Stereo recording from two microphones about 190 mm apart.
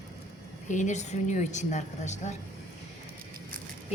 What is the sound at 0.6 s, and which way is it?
A woman's voice, 40° left (ahead or behind).